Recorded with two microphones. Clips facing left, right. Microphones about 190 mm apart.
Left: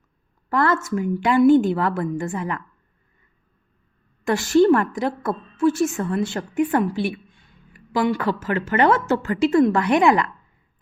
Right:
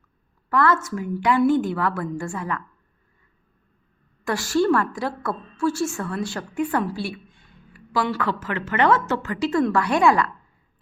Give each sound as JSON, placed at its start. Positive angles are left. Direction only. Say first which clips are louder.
{"t": 0.5, "sound": "a woman's voice", "louder": "left 1 dB", "side_deg": 25}
{"t": 4.2, "sound": "a woman's voice", "louder": "left 5 dB", "side_deg": 20}
{"t": 8.2, "sound": "a woman's voice", "louder": "left 3 dB", "side_deg": 30}